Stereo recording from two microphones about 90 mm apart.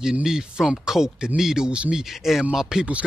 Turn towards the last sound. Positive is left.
turn(degrees=-10)  # may be behind; listen again after turning